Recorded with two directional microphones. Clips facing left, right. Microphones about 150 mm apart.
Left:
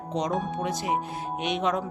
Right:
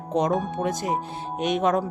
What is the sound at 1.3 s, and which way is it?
Speech, 45° right (ahead or behind).